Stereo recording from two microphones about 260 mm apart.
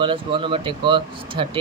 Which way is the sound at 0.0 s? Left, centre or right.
Centre.